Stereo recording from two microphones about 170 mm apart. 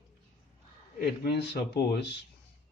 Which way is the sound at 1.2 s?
70° left (ahead or behind).